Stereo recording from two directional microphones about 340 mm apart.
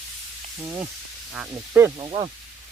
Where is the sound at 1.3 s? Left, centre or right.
Centre.